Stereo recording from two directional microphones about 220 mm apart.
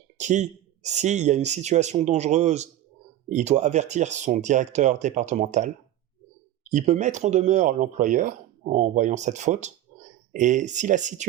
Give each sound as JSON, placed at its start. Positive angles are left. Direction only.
{"t": 0.2, "sound": "speech", "side_deg": -35}